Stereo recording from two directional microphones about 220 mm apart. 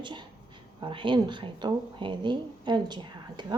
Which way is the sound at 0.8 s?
20° right (ahead or behind).